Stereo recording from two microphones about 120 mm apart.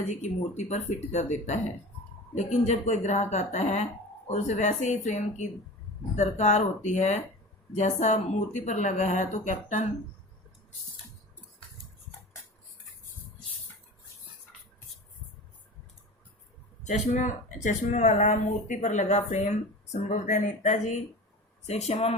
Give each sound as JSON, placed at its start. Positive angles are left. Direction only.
{"t": 0.1, "sound": "speech", "side_deg": 75}
{"t": 16.8, "sound": "speech", "side_deg": 90}
{"t": 19.9, "sound": "speech", "side_deg": 90}
{"t": 21.7, "sound": "speech", "side_deg": 65}